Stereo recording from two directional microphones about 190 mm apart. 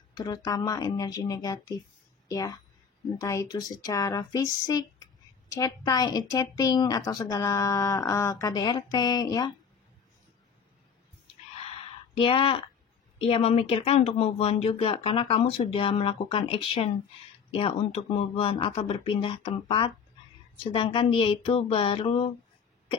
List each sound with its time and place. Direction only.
0.1 s a woman's voice: 20° left (ahead or behind)
12.2 s a woman's voice: 25° left (ahead or behind)